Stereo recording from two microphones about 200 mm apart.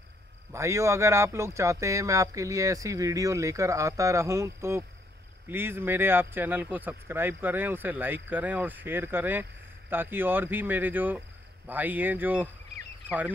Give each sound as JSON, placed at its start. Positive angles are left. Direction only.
{"t": 0.5, "sound": "speech", "side_deg": -15}